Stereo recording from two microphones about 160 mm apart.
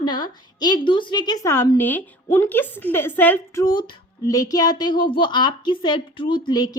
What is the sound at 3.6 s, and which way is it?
A woman's voice, 25° left (ahead or behind).